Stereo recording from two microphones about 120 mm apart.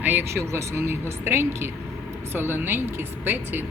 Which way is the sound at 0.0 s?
15° right (ahead or behind).